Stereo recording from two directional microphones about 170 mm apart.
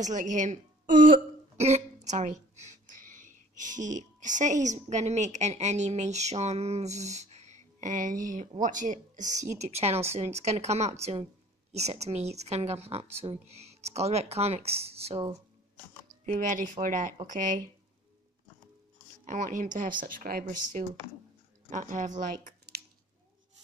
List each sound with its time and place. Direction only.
0.0 s speech: 45° right (ahead or behind)
16.3 s speech: 50° right (ahead or behind)
19.2 s speech: 45° right (ahead or behind)